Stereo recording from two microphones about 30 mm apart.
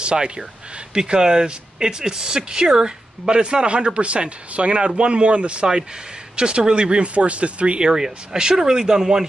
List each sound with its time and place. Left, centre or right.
0.0 s speech: right
7.9 s speech: right